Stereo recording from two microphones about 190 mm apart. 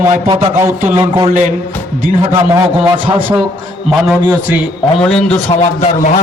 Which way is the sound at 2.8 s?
25° right (ahead or behind).